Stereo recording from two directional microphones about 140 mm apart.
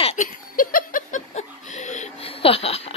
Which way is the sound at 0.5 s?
80° left.